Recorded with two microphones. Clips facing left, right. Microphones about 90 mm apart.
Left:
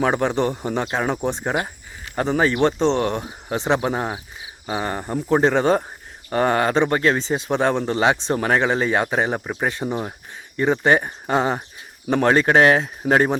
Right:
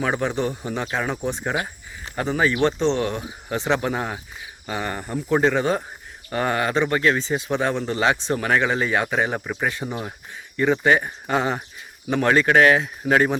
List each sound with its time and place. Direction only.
0.0 s speech: 40° left (ahead or behind)
3.5 s speech: 20° left (ahead or behind); by 7.2 s 35° left (ahead or behind)
7.2 s speech: 25° left (ahead or behind)
7.5 s speech: 40° left (ahead or behind)
7.9 s speech: 30° left (ahead or behind)